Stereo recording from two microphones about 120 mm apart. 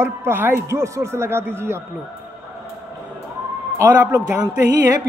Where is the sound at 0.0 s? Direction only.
20° right (ahead or behind).